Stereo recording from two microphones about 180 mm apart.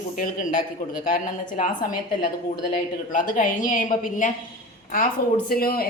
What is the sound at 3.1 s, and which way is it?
A woman's voice, 45° left (ahead or behind).